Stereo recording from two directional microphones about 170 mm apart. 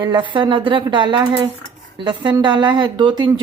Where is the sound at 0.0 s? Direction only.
30° right (ahead or behind).